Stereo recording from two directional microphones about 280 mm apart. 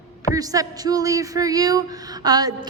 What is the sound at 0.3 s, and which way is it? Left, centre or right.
A woman's voice, centre.